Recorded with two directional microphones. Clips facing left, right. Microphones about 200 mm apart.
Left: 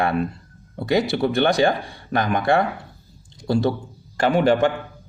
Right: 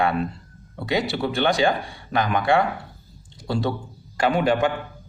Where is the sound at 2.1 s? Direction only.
50° left (ahead or behind).